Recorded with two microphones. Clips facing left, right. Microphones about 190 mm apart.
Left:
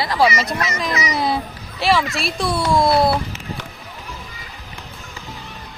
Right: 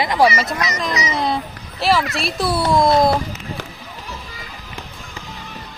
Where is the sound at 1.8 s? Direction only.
Centre (ahead or behind).